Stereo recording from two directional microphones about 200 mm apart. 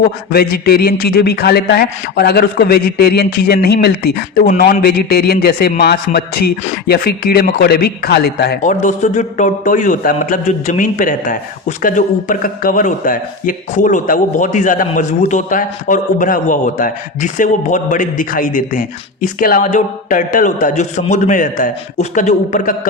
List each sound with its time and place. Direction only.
0.5 s speech: 50° left (ahead or behind)